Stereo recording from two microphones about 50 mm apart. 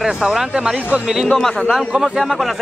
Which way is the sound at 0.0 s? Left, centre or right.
Centre.